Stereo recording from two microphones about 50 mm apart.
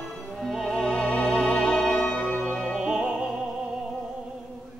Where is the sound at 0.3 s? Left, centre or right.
Centre.